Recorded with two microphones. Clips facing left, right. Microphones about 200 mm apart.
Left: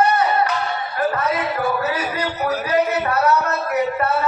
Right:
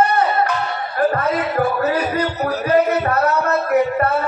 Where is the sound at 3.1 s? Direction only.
55° right (ahead or behind).